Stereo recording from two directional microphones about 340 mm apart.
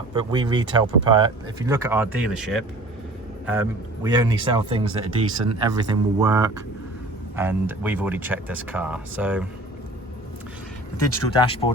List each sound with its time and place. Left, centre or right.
0.1 s speech: centre
10.9 s speech: centre